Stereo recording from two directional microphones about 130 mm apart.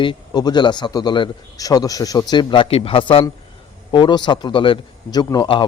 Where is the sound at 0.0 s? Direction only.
35° left (ahead or behind).